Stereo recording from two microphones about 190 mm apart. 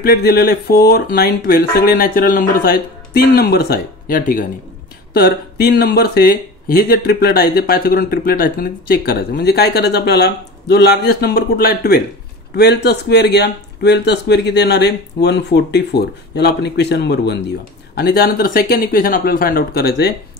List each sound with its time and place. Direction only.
0.0 s speech: 55° left (ahead or behind)